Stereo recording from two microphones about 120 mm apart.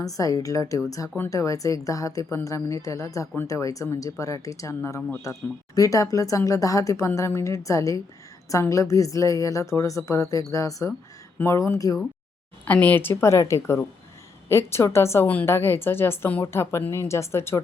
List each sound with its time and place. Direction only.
0.0 s a woman's voice: 30° left (ahead or behind)
12.6 s a woman's voice: 15° left (ahead or behind)